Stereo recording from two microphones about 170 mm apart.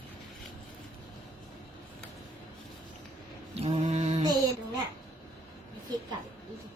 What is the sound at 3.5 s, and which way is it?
Mantra, 35° right (ahead or behind).